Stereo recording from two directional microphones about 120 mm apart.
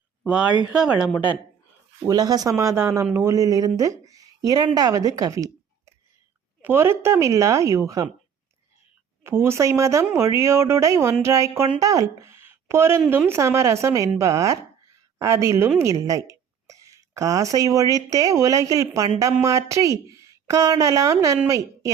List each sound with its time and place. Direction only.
0.3 s speech: 10° right (ahead or behind)
2.0 s speech: 35° right (ahead or behind)
9.2 s a woman's voice: 20° right (ahead or behind)